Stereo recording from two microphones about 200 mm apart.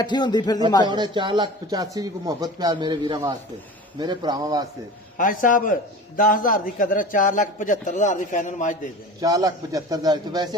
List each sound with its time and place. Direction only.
0.0 s speech: 20° left (ahead or behind)
0.8 s a man's voice: 25° right (ahead or behind)
5.1 s a man's voice: 45° left (ahead or behind)
9.2 s a man's voice: 20° right (ahead or behind)